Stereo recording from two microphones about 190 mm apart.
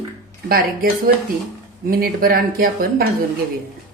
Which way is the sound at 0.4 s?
50° right (ahead or behind).